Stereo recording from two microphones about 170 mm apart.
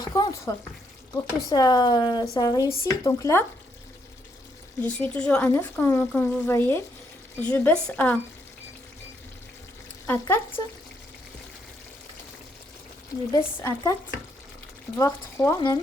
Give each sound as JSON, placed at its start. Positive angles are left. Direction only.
{"t": 0.0, "sound": "frying", "side_deg": 25}
{"t": 1.1, "sound": "speech", "side_deg": 25}
{"t": 4.8, "sound": "speech", "side_deg": 5}
{"t": 10.1, "sound": "speech", "side_deg": 15}
{"t": 13.6, "sound": "speech", "side_deg": 15}
{"t": 14.9, "sound": "speech", "side_deg": 15}